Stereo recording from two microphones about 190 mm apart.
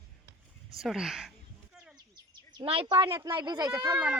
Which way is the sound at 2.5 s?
30° right (ahead or behind).